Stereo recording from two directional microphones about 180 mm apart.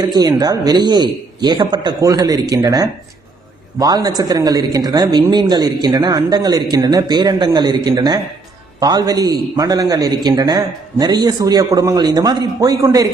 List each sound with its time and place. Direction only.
0.0 s speech: 20° right (ahead or behind)